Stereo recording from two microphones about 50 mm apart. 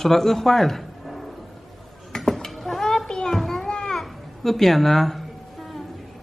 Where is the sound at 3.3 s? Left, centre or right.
Centre.